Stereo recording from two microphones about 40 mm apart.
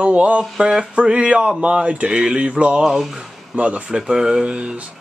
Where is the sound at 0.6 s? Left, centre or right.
Centre.